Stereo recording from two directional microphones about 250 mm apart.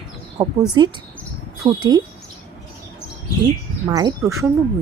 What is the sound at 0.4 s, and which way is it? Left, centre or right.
Speech, centre.